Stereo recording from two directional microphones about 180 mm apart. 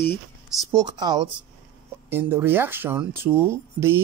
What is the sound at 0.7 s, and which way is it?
Speech, 20° right (ahead or behind).